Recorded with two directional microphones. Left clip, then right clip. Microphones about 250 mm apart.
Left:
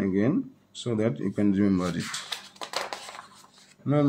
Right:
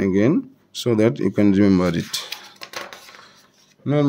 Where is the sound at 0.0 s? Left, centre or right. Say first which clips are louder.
Right 8 dB; right.